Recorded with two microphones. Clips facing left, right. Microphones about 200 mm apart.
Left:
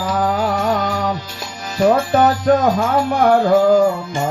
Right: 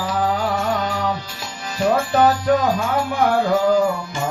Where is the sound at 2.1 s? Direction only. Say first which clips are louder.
Left 2 dB; 45° left (ahead or behind).